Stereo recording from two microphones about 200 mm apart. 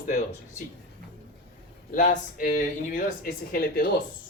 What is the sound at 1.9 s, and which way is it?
Speech, 40° left (ahead or behind).